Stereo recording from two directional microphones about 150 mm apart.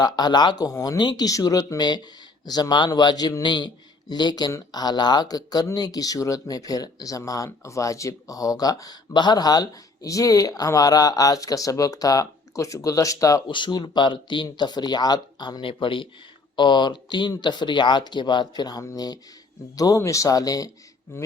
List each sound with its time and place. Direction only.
0.0 s speech: 30° left (ahead or behind)